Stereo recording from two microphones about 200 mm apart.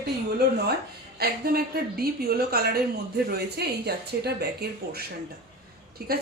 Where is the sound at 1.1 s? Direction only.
50° right (ahead or behind).